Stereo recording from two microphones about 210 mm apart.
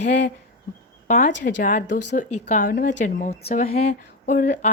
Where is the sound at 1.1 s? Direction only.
40° left (ahead or behind).